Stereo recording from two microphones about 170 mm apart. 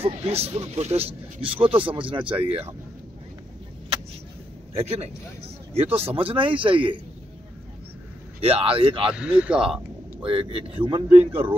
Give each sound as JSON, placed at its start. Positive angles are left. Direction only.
{"t": 0.0, "sound": "speech", "side_deg": -35}
{"t": 4.7, "sound": "speech", "side_deg": -40}
{"t": 8.4, "sound": "speech", "side_deg": -35}
{"t": 9.1, "sound": "speech", "side_deg": -5}
{"t": 10.2, "sound": "speech", "side_deg": -30}